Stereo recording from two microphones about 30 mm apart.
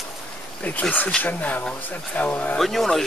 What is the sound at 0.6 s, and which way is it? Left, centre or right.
Speech, left.